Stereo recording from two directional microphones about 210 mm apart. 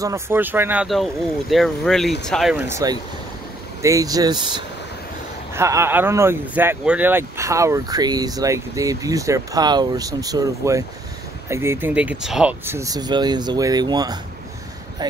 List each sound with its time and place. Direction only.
0.0 s speech: 10° right (ahead or behind)